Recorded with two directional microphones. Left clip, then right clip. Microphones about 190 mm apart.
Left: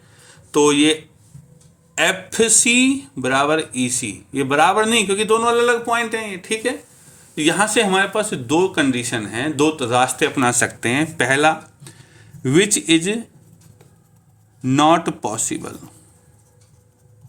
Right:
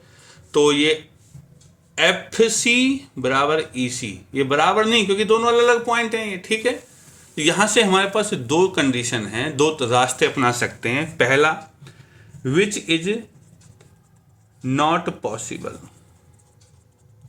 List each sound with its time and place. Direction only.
0.1 s a sound: 15° left (ahead or behind)
2.0 s speech: 25° left (ahead or behind); by 13.1 s 55° left (ahead or behind)
14.6 s speech: 55° left (ahead or behind)